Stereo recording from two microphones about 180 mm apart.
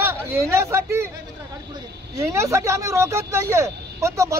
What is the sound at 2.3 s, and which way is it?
Speech, 15° right (ahead or behind).